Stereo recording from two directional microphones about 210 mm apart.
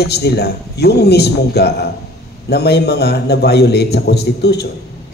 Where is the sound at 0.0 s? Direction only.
50° left (ahead or behind).